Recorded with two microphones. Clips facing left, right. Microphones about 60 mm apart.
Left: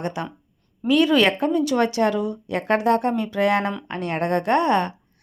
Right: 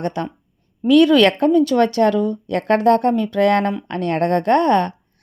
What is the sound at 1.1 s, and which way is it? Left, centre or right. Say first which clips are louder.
A woman's voice: right 5 dB; right.